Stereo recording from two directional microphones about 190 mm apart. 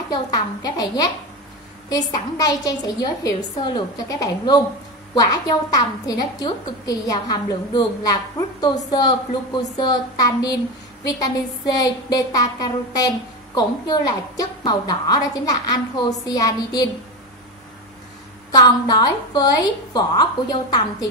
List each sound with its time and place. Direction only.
0.1 s a woman's voice: 20° left (ahead or behind)
18.5 s a woman's voice: 20° left (ahead or behind)